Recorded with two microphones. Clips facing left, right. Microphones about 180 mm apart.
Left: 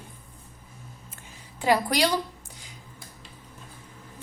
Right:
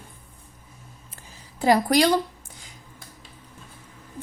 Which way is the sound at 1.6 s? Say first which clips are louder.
Right 4 dB; 45° right (ahead or behind).